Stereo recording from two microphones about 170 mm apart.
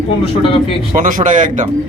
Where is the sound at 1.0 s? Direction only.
50° right (ahead or behind).